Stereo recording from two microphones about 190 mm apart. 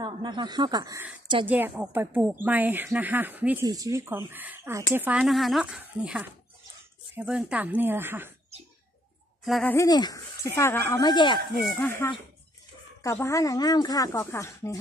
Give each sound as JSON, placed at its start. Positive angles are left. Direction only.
{"t": 0.0, "sound": "speech", "side_deg": -25}
{"t": 1.5, "sound": "speech", "side_deg": -10}
{"t": 9.4, "sound": "speech", "side_deg": 0}
{"t": 9.8, "sound": "speech", "side_deg": 20}
{"t": 11.8, "sound": "speech", "side_deg": 15}